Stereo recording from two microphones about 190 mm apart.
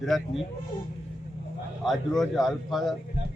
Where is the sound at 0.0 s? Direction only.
Centre (ahead or behind).